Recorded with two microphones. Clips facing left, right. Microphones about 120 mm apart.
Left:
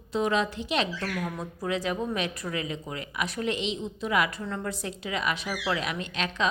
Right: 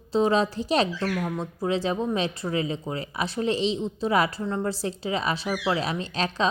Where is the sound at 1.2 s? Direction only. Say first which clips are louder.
Right 4 dB; 25° right (ahead or behind).